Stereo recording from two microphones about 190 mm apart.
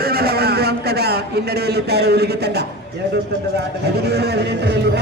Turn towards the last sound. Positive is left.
turn(degrees=-60)  # may be behind; listen again after turning